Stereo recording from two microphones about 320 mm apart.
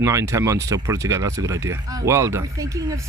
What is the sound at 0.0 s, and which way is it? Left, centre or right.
Speech, centre.